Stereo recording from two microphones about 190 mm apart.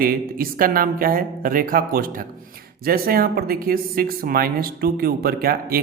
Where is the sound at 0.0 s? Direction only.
50° right (ahead or behind).